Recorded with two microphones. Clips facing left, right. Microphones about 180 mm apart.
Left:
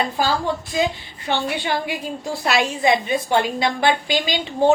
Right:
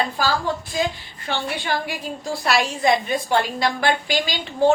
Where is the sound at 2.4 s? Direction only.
20° left (ahead or behind).